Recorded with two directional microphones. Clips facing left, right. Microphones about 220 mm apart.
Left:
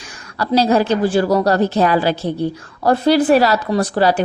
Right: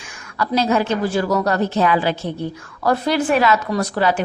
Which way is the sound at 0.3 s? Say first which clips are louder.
Left 4 dB; 35° left (ahead or behind).